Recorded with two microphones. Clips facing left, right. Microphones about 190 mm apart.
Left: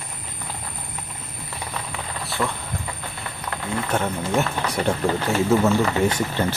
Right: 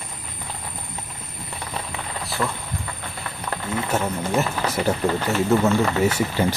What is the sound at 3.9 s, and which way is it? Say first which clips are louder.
Speech: even; centre (ahead or behind).